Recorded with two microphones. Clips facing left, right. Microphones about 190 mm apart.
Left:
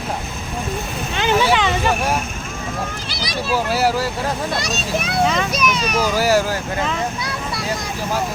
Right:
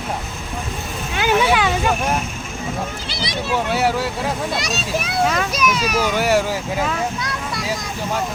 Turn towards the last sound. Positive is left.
turn(degrees=5)  # may be behind; listen again after turning